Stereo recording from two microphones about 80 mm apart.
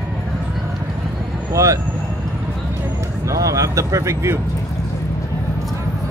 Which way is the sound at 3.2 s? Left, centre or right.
Right.